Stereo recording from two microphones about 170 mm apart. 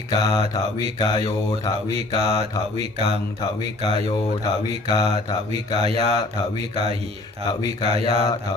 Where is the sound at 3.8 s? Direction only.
25° left (ahead or behind).